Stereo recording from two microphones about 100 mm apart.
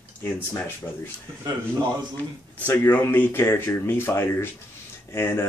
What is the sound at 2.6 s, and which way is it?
Speech, 20° left (ahead or behind).